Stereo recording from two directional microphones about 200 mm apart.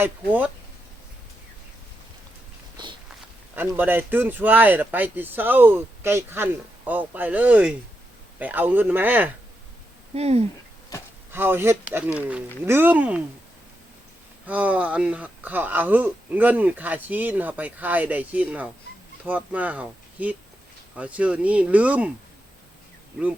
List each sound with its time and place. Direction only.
2.7 s walk: 25° right (ahead or behind)
3.5 s speech: 10° right (ahead or behind)
10.2 s speech: 30° right (ahead or behind)
11.3 s speech: 10° right (ahead or behind)
14.4 s speech: 10° right (ahead or behind)